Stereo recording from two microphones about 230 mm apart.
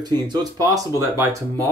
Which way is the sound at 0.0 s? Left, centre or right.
Centre.